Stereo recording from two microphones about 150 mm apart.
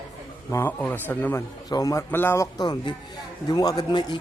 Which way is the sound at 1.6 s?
25° left (ahead or behind).